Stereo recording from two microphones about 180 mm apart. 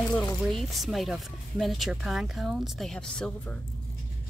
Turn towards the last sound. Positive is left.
turn(degrees=5)  # may be behind; listen again after turning